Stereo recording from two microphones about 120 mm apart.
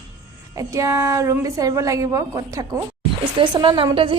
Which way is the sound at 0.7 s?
25° right (ahead or behind).